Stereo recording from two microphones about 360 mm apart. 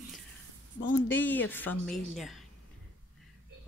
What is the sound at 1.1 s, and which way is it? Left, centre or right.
Speech, centre.